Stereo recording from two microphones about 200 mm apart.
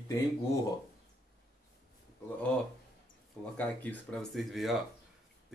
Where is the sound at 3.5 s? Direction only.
10° left (ahead or behind).